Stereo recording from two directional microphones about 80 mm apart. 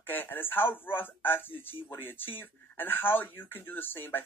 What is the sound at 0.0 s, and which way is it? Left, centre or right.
A man's voice, left.